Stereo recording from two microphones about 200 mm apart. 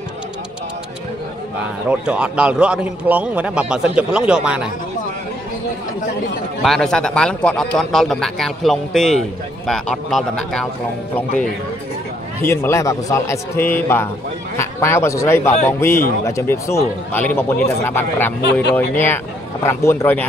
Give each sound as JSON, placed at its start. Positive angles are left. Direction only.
{"t": 1.9, "sound": "a man's voice", "side_deg": -5}
{"t": 6.6, "sound": "a man's voice", "side_deg": 0}
{"t": 12.4, "sound": "a man's voice", "side_deg": 10}
{"t": 18.4, "sound": "speech", "side_deg": 60}
{"t": 19.6, "sound": "a man's voice", "side_deg": 15}